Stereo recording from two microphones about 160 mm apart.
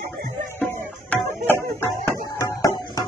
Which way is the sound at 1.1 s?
15° left (ahead or behind).